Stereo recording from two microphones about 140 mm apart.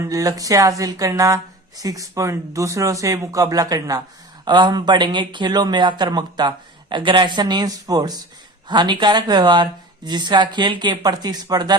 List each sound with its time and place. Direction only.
0.0 s speech: 25° right (ahead or behind)